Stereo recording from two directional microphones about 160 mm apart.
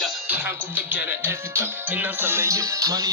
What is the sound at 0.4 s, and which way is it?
Speech, 10° right (ahead or behind).